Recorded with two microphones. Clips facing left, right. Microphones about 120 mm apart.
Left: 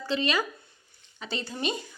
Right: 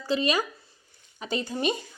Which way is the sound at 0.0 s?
10° right (ahead or behind).